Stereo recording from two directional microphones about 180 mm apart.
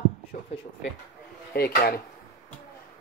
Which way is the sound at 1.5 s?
60° left (ahead or behind).